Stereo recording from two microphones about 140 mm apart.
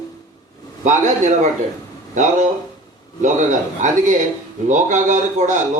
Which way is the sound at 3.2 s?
65° right (ahead or behind).